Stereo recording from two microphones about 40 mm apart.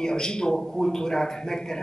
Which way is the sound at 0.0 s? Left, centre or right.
Centre.